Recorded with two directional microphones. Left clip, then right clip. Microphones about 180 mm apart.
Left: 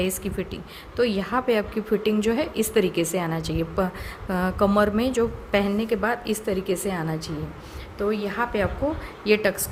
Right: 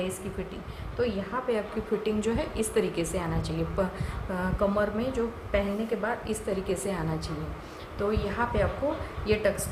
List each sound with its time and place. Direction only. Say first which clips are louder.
0.9 s a woman's voice: left 7 dB; 55° left (ahead or behind)
2.0 s a woman's voice: left 6 dB; 40° left (ahead or behind)
4.3 s a woman's voice: left 6 dB; 50° left (ahead or behind)